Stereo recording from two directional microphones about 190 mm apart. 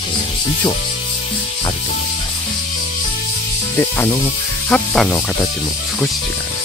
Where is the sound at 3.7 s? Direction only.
10° left (ahead or behind).